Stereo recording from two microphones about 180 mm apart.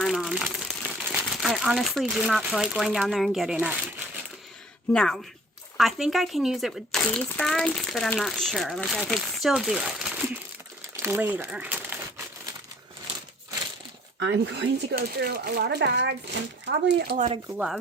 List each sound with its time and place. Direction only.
0.0 s crumpling: centre (ahead or behind)
1.0 s speech: 5° right (ahead or behind)
4.9 s speech: 5° left (ahead or behind)
10.9 s crumpling: 15° right (ahead or behind)
14.2 s speech: 80° right
17.2 s speech: 35° right (ahead or behind)